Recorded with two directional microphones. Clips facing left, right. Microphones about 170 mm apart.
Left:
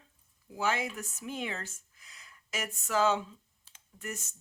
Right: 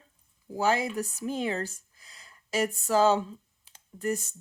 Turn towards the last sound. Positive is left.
turn(degrees=-35)  # may be behind; listen again after turning